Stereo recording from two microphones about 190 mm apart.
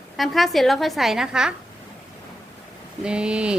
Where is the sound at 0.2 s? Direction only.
Centre (ahead or behind).